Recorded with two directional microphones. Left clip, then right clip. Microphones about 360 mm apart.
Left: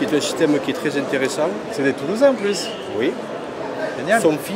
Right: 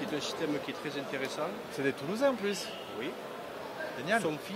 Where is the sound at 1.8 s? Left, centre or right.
Right.